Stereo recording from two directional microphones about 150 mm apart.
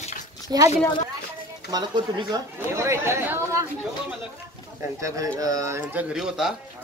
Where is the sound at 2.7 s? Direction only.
20° right (ahead or behind).